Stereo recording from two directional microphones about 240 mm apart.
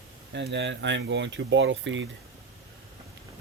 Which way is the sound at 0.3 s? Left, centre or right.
Right.